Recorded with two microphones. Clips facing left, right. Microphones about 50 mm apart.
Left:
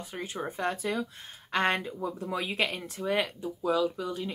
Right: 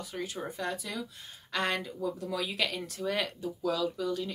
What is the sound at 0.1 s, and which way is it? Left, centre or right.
A woman's voice, left.